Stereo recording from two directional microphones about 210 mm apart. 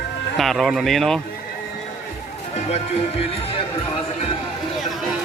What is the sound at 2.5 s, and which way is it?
Speech, 30° left (ahead or behind).